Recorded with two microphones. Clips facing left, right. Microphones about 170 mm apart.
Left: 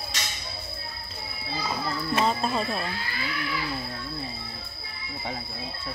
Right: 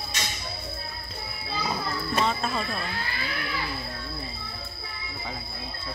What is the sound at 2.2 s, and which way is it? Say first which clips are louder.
Speech: left 2 dB; 30° left (ahead or behind).